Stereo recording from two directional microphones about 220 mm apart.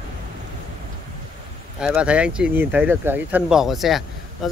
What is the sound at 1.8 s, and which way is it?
Speech, 5° right (ahead or behind).